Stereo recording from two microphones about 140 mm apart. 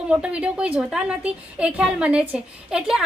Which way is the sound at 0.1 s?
10° right (ahead or behind).